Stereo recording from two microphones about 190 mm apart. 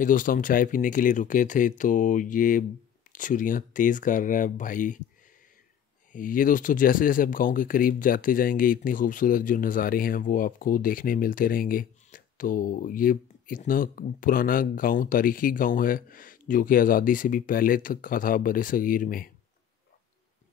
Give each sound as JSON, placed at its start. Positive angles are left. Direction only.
{"t": 0.0, "sound": "speech", "side_deg": 45}
{"t": 6.1, "sound": "speech", "side_deg": 45}